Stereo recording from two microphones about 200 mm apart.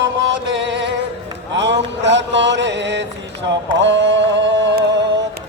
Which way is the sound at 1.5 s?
60° right (ahead or behind).